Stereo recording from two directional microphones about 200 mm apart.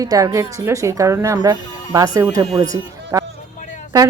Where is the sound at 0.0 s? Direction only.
15° right (ahead or behind).